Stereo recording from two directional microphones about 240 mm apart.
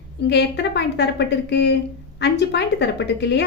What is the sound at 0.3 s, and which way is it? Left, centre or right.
A woman's voice, left.